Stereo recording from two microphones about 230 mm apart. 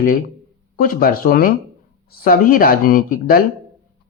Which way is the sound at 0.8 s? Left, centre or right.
Left.